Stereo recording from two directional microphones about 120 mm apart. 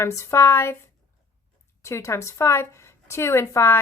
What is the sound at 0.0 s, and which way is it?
Speech, 25° left (ahead or behind).